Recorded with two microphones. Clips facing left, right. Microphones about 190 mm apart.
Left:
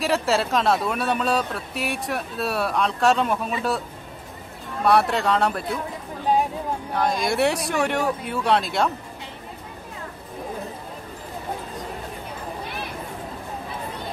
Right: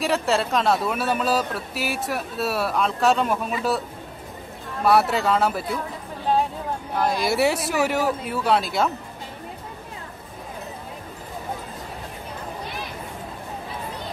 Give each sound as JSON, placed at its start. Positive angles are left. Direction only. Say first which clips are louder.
{"t": 0.0, "sound": "speech", "louder": "even", "side_deg": 0}
{"t": 4.8, "sound": "speech", "louder": "even", "side_deg": 0}
{"t": 6.3, "sound": "a sound", "louder": "left 1 dB", "side_deg": 15}
{"t": 6.9, "sound": "speech", "louder": "right 1 dB", "side_deg": -5}